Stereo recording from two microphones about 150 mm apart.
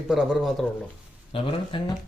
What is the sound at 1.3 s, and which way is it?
Speech, 35° left (ahead or behind).